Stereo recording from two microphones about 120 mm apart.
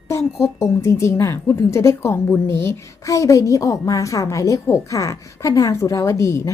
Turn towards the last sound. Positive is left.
turn(degrees=25)  # may be behind; listen again after turning